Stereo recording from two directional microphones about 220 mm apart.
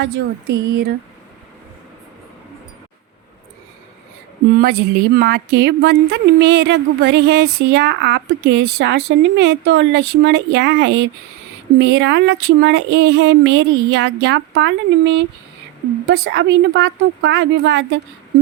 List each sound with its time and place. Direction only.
0.0 s speech: 50° right (ahead or behind)
4.6 s speech: 45° right (ahead or behind)